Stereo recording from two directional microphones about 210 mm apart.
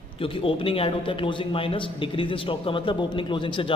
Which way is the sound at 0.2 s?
25° left (ahead or behind).